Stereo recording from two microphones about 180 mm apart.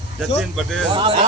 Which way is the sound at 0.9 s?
30° right (ahead or behind).